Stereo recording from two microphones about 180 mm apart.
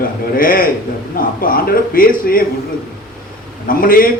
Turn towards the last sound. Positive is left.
turn(degrees=50)  # may be behind; listen again after turning